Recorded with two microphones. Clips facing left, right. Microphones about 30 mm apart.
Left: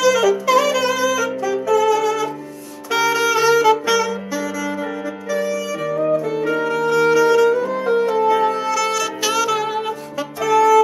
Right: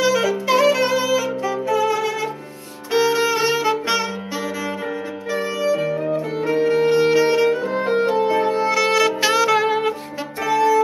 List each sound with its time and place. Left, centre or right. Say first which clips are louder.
0.0 s saxophone: left 3 dB; right
2.9 s music: left 1 dB; right
5.3 s saxophone: right 1 dB; right